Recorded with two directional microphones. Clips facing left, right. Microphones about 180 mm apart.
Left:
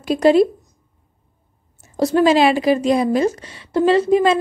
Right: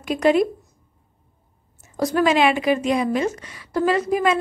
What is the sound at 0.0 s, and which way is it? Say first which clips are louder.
Speech: left 4 dB; 30° left (ahead or behind).